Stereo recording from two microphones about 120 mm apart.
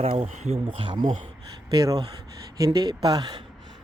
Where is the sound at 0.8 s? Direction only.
40° right (ahead or behind).